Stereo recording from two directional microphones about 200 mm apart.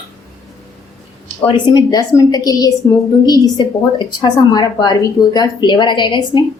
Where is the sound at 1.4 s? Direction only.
20° left (ahead or behind).